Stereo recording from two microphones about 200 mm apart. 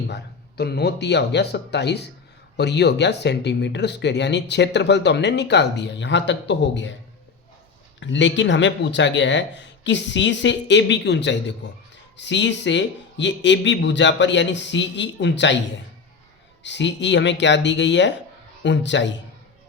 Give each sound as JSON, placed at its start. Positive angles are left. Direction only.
{"t": 0.1, "sound": "speech", "side_deg": 55}
{"t": 7.9, "sound": "speech", "side_deg": 65}
{"t": 16.6, "sound": "speech", "side_deg": 60}